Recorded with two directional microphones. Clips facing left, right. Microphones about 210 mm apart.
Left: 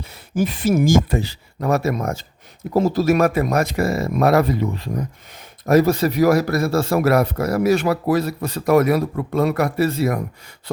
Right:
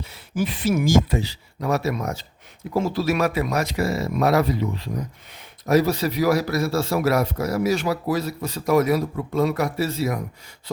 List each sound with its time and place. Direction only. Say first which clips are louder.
0.0 s a man's voice: left 4 dB; 50° left (ahead or behind)